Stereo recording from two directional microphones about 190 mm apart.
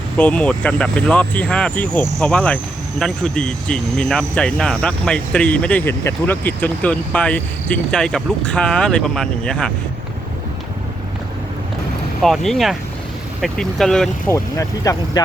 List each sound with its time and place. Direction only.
0.2 s speech: 5° left (ahead or behind)
12.2 s speech: centre (ahead or behind)
14.3 s speech: 15° left (ahead or behind)